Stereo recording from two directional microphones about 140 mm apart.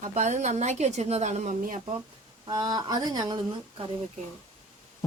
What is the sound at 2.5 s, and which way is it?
Speech, 30° right (ahead or behind).